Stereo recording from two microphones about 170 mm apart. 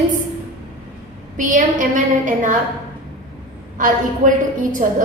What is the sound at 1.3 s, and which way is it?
A woman's voice, 50° right (ahead or behind).